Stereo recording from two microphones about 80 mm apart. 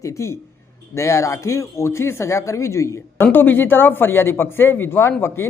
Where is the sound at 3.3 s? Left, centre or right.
Left.